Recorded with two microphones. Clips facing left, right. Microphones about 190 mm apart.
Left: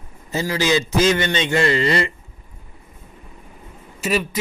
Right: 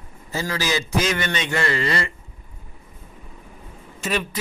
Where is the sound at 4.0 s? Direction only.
5° left (ahead or behind).